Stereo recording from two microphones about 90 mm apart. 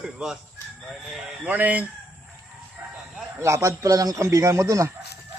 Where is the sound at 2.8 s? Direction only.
15° right (ahead or behind).